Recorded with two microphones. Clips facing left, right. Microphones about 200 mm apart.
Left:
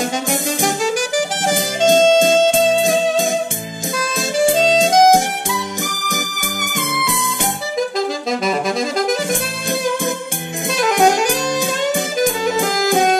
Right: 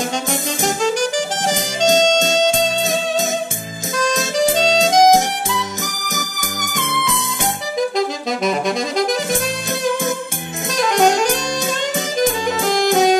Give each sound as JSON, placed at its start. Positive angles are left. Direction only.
{"t": 0.8, "sound": "music", "side_deg": 10}
{"t": 2.8, "sound": "music", "side_deg": 50}
{"t": 4.6, "sound": "music", "side_deg": 0}
{"t": 8.3, "sound": "saxophone", "side_deg": 0}
{"t": 10.9, "sound": "saxophone", "side_deg": 10}
{"t": 12.6, "sound": "music", "side_deg": 0}